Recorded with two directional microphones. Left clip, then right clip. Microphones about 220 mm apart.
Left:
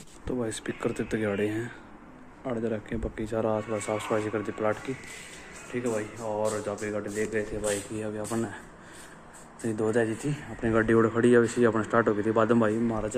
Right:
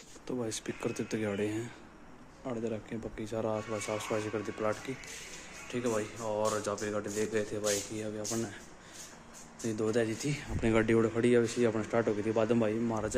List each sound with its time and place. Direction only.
0.3 s speech: 5° right (ahead or behind)
5.7 s speech: 25° right (ahead or behind)
6.4 s speech: 15° right (ahead or behind)
7.6 s speech: centre (ahead or behind)
9.7 s speech: 5° right (ahead or behind)
11.1 s speech: centre (ahead or behind)